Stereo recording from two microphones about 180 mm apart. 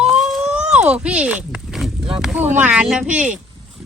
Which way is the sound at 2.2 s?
5° right (ahead or behind).